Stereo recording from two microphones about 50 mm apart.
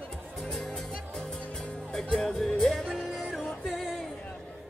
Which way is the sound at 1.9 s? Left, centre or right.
Centre.